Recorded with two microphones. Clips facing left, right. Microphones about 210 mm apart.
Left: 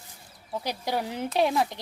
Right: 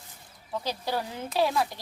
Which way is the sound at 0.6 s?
15° left (ahead or behind).